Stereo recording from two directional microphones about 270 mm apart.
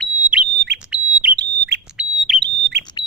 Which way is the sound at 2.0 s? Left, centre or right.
Centre.